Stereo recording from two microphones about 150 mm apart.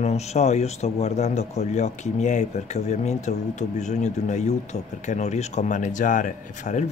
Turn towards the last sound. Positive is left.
turn(degrees=55)  # may be behind; listen again after turning